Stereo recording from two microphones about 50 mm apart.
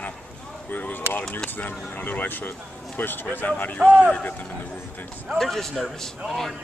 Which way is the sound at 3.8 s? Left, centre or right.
Right.